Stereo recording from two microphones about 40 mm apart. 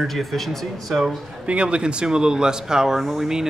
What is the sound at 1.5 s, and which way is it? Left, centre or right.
Speech, right.